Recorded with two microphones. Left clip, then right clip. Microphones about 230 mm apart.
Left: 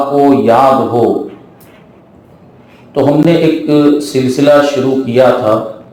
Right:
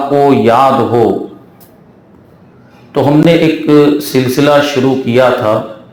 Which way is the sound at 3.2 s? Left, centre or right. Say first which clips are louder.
Right 1 dB; right.